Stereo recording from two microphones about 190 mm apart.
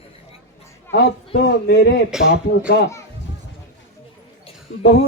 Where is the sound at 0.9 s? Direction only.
60° left (ahead or behind).